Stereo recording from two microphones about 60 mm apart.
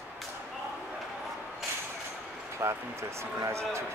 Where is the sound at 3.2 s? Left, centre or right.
Right.